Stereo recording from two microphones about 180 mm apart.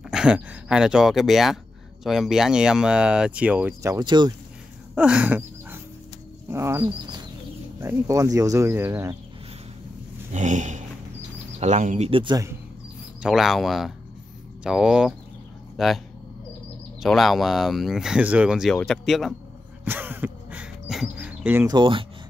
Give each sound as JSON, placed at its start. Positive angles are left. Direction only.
{"t": 0.1, "sound": "speech", "side_deg": -5}
{"t": 4.9, "sound": "a sound", "side_deg": -5}
{"t": 6.5, "sound": "speech", "side_deg": -15}
{"t": 6.9, "sound": "bird", "side_deg": -25}
{"t": 7.8, "sound": "speech", "side_deg": -20}
{"t": 10.3, "sound": "speech", "side_deg": -40}
{"t": 12.1, "sound": "speech", "side_deg": -25}
{"t": 13.2, "sound": "speech", "side_deg": 0}
{"t": 17.0, "sound": "speech", "side_deg": 0}
{"t": 19.8, "sound": "a sound", "side_deg": -10}
{"t": 21.6, "sound": "speech", "side_deg": -25}